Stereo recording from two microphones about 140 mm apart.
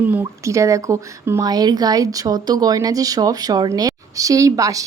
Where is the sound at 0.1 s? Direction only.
20° right (ahead or behind).